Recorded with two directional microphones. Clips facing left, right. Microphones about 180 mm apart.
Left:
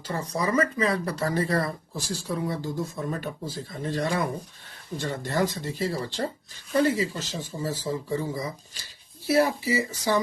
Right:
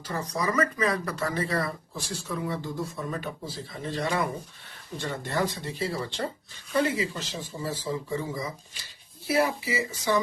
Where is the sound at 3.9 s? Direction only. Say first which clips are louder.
Left 2 dB; 45° left (ahead or behind).